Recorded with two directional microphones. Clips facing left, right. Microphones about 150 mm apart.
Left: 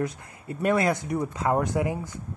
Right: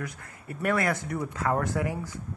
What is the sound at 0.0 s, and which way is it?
Speech, 20° left (ahead or behind).